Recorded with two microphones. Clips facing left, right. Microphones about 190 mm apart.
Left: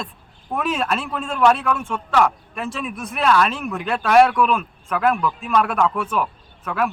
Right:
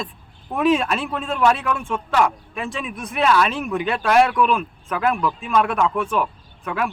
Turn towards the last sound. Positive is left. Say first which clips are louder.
# left 2 dB
turn(degrees=0)  # may be behind; listen again after turning